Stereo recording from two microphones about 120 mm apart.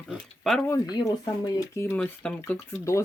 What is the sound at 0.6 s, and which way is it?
Speech, 30° left (ahead or behind).